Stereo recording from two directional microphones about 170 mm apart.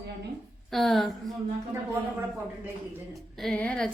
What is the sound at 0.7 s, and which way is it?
Speech, centre (ahead or behind).